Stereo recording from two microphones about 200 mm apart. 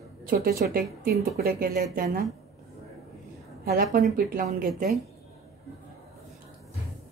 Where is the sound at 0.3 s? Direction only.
45° right (ahead or behind).